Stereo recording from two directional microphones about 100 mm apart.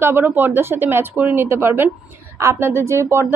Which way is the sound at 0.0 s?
20° right (ahead or behind).